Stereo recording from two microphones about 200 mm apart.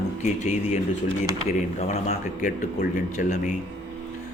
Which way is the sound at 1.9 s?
35° left (ahead or behind).